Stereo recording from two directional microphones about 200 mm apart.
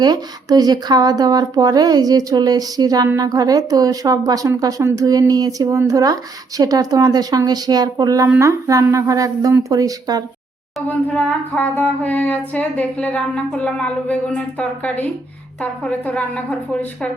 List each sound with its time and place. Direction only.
0.0 s speech: 20° right (ahead or behind)
10.8 s singing: 5° left (ahead or behind)